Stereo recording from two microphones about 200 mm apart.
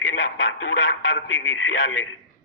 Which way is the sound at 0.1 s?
70° left (ahead or behind).